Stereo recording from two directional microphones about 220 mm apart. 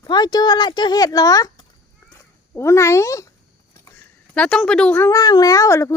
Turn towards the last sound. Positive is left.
turn(degrees=15)  # may be behind; listen again after turning